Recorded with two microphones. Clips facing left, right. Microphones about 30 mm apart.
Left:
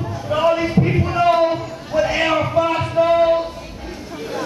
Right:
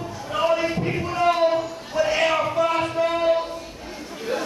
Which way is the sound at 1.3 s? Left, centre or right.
Centre.